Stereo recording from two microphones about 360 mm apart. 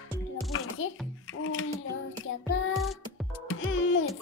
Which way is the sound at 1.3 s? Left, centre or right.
Left.